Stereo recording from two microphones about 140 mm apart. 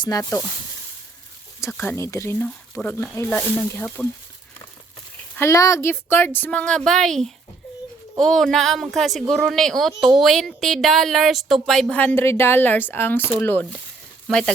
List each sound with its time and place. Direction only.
0.2 s speech: 15° left (ahead or behind)
1.6 s speech: 15° left (ahead or behind)
5.4 s speech: 20° left (ahead or behind); by 14.5 s 5° left (ahead or behind)